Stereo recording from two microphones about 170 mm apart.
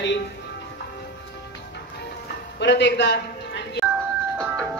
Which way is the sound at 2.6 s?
90° left.